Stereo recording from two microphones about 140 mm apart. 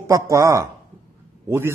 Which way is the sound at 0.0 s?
20° right (ahead or behind).